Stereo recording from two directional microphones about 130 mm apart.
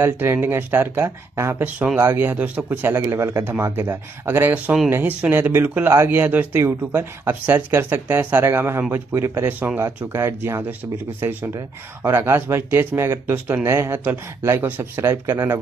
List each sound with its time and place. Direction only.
0.0 s speech: 15° right (ahead or behind)